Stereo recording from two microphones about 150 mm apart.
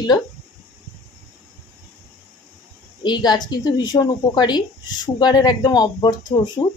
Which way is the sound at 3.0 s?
30° left (ahead or behind).